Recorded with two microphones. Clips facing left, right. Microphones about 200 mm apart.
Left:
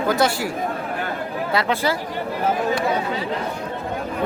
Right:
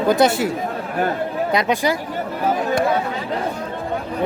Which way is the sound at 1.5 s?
15° right (ahead or behind).